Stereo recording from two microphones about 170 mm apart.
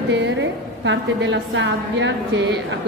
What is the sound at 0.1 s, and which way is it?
A woman's voice, 90° right.